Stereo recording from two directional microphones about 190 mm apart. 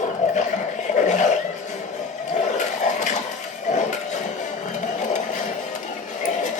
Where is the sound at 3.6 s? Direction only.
40° left (ahead or behind).